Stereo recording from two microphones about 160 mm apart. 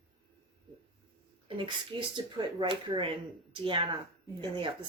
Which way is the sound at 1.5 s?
30° right (ahead or behind).